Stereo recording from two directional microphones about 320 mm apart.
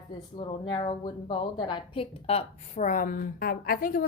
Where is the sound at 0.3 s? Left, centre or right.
Centre.